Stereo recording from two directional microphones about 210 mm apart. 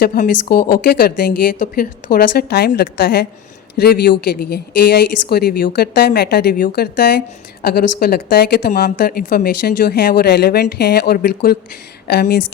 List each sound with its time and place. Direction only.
0.0 s speech: 45° left (ahead or behind)